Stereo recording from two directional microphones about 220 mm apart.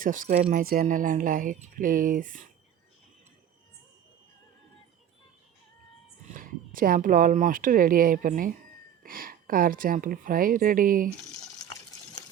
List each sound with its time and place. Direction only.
0.0 s speech: 40° right (ahead or behind)
0.6 s speech: 40° right (ahead or behind)
6.2 s speech: 40° right (ahead or behind)